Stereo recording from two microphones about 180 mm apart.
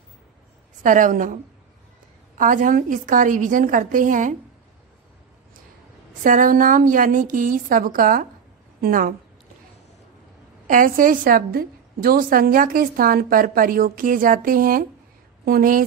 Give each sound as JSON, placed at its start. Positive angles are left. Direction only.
{"t": 0.8, "sound": "a woman's voice", "side_deg": -45}
{"t": 6.2, "sound": "a woman's voice", "side_deg": -45}
{"t": 10.7, "sound": "a woman's voice", "side_deg": -50}